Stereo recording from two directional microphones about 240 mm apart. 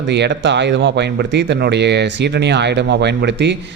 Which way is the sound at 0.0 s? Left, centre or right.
Right.